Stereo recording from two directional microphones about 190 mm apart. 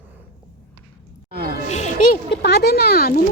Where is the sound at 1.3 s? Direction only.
50° right (ahead or behind).